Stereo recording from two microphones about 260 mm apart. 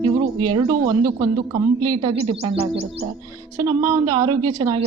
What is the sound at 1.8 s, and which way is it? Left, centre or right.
Speech, right.